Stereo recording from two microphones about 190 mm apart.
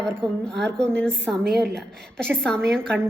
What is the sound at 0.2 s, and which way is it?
Speech, 25° right (ahead or behind).